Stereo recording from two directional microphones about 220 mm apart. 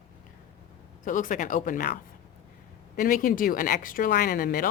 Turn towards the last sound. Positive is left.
turn(degrees=40)  # may be behind; listen again after turning